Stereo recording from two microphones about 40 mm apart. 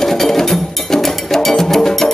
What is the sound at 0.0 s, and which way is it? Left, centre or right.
Music, centre.